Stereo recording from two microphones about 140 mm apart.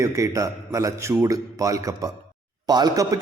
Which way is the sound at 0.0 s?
25° right (ahead or behind).